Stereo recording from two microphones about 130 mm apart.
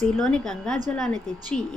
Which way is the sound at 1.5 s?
70° left (ahead or behind).